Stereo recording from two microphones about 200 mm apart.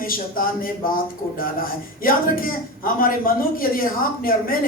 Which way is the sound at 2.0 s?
45° left (ahead or behind).